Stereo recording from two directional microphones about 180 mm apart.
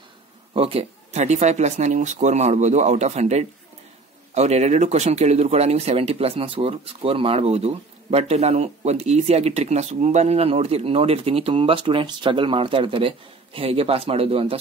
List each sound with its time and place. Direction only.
0.6 s speech: 30° right (ahead or behind)